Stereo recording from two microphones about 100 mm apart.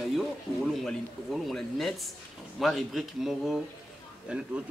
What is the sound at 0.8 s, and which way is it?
A man's voice, centre (ahead or behind).